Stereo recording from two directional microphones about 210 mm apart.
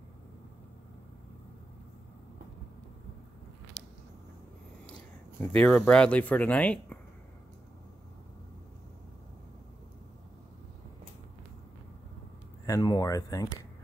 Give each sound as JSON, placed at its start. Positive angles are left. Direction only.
{"t": 5.4, "sound": "speech", "side_deg": 5}
{"t": 12.6, "sound": "speech", "side_deg": 20}